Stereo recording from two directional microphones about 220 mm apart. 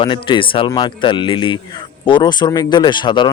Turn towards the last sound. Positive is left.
turn(degrees=20)  # may be behind; listen again after turning